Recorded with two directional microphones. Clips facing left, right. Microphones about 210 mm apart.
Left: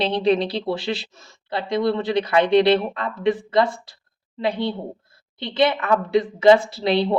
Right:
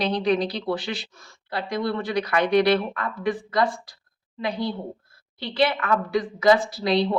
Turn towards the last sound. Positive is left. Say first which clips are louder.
# left 2 dB
turn(degrees=25)  # may be behind; listen again after turning